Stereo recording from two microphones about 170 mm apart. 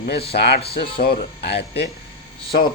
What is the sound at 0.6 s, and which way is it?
Speech, 35° left (ahead or behind).